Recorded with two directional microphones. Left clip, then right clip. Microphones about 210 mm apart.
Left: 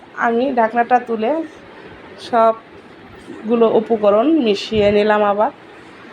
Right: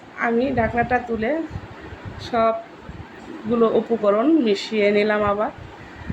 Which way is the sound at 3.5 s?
10° left (ahead or behind).